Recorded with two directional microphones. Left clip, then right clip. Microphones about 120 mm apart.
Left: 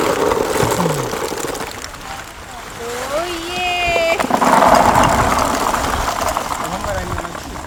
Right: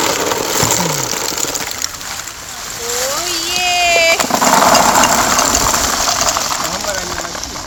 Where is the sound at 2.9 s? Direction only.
30° right (ahead or behind).